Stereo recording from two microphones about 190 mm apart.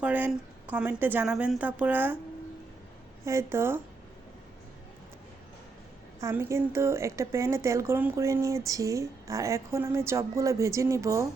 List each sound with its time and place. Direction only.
0.0 s speech: 5° right (ahead or behind)
3.2 s speech: 15° right (ahead or behind)
6.1 s speech: 15° right (ahead or behind)